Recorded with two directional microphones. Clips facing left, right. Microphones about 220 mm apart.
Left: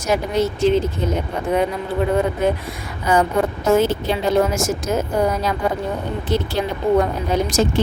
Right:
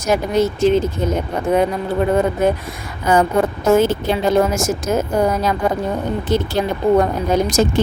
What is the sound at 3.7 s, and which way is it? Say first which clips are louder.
Speech: right 2 dB; 50° right (ahead or behind).